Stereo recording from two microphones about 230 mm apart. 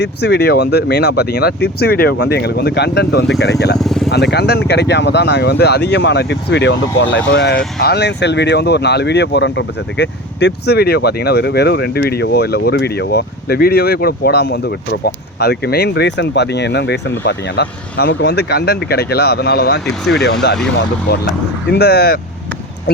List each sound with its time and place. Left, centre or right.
0.0 s speech: left
3.8 s speech: centre
4.1 s speech: left
19.8 s speech: centre
21.1 s speech: left